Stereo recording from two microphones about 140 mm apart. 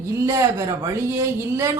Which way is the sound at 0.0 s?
20° right (ahead or behind).